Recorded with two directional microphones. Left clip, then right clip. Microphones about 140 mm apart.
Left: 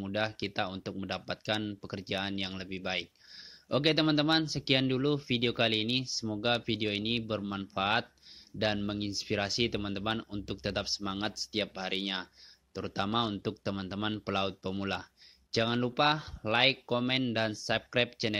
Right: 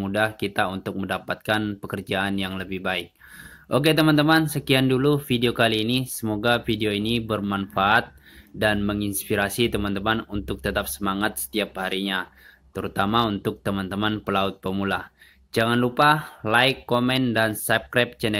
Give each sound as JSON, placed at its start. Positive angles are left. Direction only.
{"t": 0.0, "sound": "speech", "side_deg": 30}